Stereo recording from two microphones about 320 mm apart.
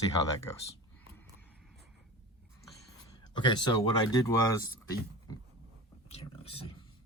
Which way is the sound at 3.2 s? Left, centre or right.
Centre.